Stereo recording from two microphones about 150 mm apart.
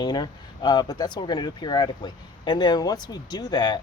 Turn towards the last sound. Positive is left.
turn(degrees=30)  # may be behind; listen again after turning